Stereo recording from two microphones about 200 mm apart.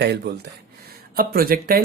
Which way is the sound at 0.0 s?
55° right (ahead or behind).